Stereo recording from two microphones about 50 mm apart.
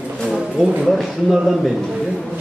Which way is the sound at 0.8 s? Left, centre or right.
Centre.